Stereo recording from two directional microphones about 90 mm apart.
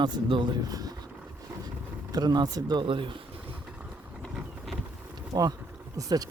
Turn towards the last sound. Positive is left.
turn(degrees=-45)  # may be behind; listen again after turning